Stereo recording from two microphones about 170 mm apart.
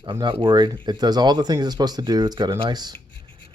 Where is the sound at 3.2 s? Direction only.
30° right (ahead or behind).